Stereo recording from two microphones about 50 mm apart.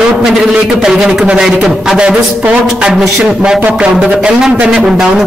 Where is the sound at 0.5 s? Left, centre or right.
Centre.